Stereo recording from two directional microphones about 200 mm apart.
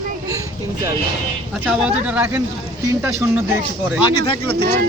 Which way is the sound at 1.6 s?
5° right (ahead or behind).